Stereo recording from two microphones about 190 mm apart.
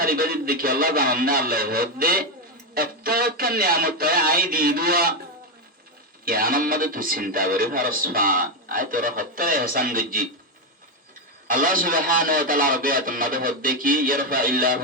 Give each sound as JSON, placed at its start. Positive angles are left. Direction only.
{"t": 0.0, "sound": "speech", "side_deg": -50}
{"t": 6.2, "sound": "speech", "side_deg": -50}
{"t": 11.4, "sound": "speech", "side_deg": -45}